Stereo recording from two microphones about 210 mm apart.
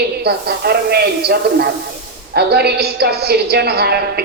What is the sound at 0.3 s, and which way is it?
A woman's voice, 50° right (ahead or behind).